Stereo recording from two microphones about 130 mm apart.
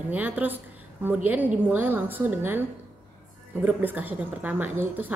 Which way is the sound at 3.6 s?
15° right (ahead or behind).